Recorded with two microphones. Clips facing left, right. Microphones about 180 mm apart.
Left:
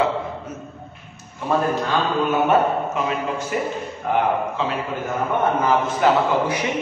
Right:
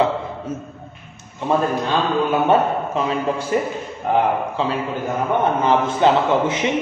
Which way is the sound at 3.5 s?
30° right (ahead or behind).